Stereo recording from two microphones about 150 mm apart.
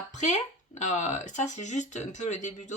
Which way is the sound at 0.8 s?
50° left (ahead or behind).